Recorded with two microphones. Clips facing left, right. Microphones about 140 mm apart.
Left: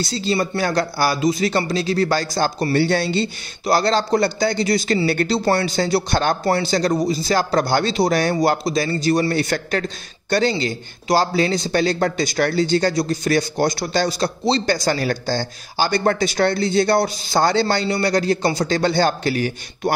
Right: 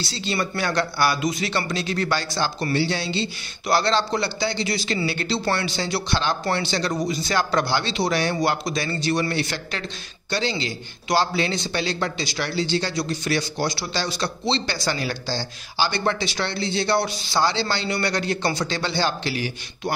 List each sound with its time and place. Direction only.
0.0 s a man's voice: 40° left (ahead or behind)
5.4 s a man's voice: 35° left (ahead or behind)
6.4 s a man's voice: 40° left (ahead or behind)
17.8 s a man's voice: 35° left (ahead or behind)